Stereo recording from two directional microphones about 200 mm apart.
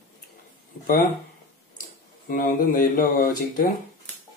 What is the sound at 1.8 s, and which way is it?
Speech, 40° left (ahead or behind).